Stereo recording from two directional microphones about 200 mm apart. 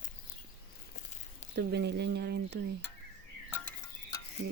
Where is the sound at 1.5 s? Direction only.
55° right (ahead or behind).